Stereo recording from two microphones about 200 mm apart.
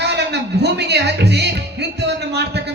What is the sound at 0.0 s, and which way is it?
Music, 55° right (ahead or behind).